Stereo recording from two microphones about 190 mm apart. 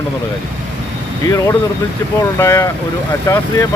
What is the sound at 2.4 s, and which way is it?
Speech, 15° left (ahead or behind).